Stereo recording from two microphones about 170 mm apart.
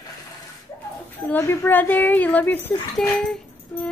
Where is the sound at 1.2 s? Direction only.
15° left (ahead or behind).